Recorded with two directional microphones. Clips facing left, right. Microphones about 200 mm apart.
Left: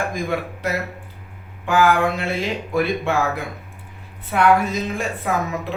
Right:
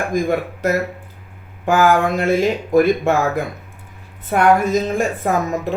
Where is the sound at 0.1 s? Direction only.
45° right (ahead or behind).